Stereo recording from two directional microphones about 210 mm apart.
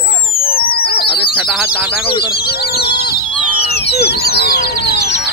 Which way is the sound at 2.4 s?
50° left (ahead or behind).